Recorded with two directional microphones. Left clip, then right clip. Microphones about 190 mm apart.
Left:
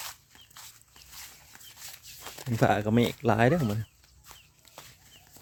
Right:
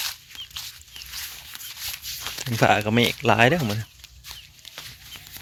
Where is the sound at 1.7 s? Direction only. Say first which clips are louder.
Right 14 dB; 5° right (ahead or behind).